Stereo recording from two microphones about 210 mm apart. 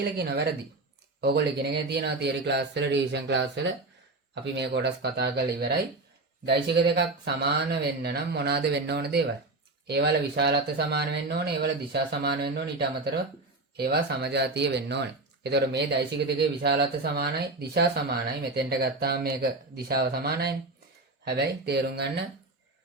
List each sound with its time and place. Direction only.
0.0 s speech: 50° right (ahead or behind)